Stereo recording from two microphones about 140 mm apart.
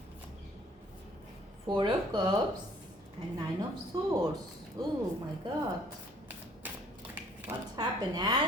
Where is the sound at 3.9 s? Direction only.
35° right (ahead or behind).